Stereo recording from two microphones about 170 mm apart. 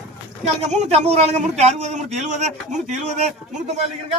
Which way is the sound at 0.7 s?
40° right (ahead or behind).